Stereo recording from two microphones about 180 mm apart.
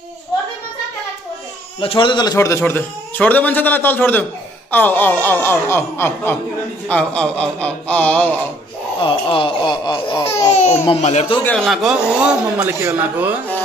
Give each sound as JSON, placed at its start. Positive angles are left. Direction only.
{"t": 1.8, "sound": "a man's voice", "side_deg": 30}
{"t": 9.0, "sound": "speech", "side_deg": 30}
{"t": 11.4, "sound": "a man's voice", "side_deg": 0}